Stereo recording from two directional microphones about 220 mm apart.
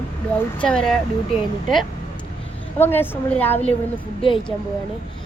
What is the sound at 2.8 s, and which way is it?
Speech, 10° left (ahead or behind).